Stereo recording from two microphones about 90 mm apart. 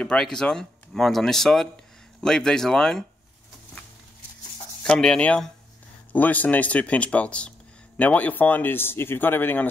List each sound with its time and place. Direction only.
0.0 s speech: 10° left (ahead or behind)
4.8 s a man's voice: 10° left (ahead or behind)